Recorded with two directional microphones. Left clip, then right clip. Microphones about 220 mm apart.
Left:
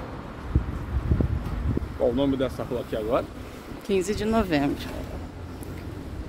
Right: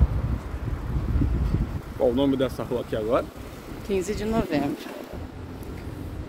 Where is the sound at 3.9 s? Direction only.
20° left (ahead or behind).